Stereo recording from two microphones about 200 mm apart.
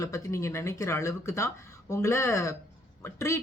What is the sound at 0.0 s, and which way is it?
Speech, 15° left (ahead or behind).